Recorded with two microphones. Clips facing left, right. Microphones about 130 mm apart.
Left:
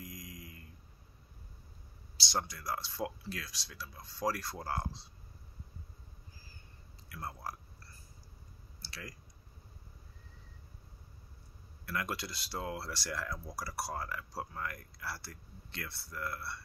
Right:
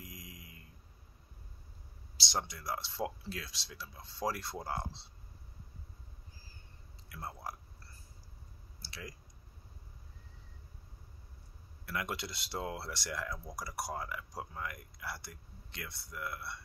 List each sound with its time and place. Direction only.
0.0 s mantra: 25° right (ahead or behind)
2.1 s speech: 20° right (ahead or behind)
7.1 s speech: 20° right (ahead or behind)
8.8 s clicking: 25° right (ahead or behind)
11.8 s speech: 20° right (ahead or behind)